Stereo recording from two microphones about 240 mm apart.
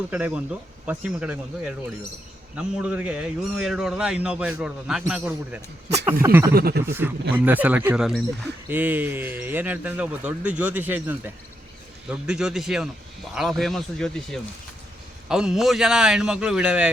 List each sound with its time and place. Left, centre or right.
0.1 s a man's voice: centre
6.5 s speech: right
6.8 s a man's voice: centre